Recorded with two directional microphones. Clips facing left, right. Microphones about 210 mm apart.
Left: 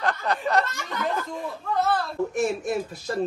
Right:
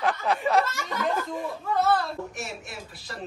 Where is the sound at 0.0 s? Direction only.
Centre (ahead or behind).